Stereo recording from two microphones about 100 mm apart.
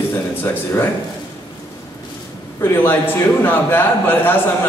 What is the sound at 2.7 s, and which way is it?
A man's voice, 20° left (ahead or behind).